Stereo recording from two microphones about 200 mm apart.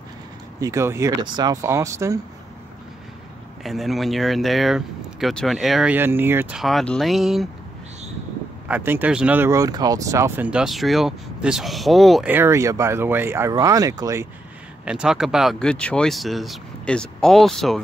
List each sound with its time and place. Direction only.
0.6 s speech: 15° right (ahead or behind)
3.6 s speech: centre (ahead or behind)
8.6 s speech: 10° right (ahead or behind)
14.9 s speech: 5° right (ahead or behind)